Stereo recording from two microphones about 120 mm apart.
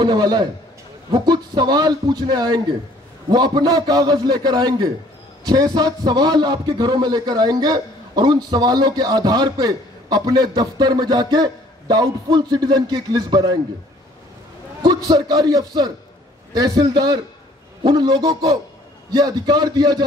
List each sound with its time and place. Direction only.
0.0 s a man's voice: 35° right (ahead or behind)
14.8 s a man's voice: 30° right (ahead or behind)